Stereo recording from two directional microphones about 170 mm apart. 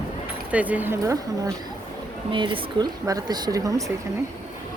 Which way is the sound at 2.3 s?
30° right (ahead or behind).